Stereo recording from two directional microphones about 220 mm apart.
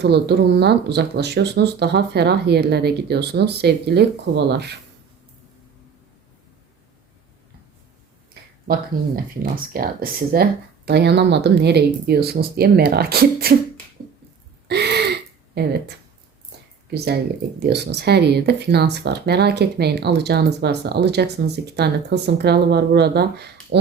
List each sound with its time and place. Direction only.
0.0 s speech: 50° right (ahead or behind)
8.7 s speech: 40° right (ahead or behind)
14.7 s gasp: 50° right (ahead or behind)
15.6 s speech: 50° right (ahead or behind)
17.6 s speech: 50° right (ahead or behind)